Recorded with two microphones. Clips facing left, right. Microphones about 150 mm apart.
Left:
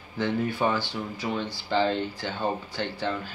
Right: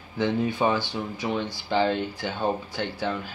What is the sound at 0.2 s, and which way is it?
Speech, 15° right (ahead or behind).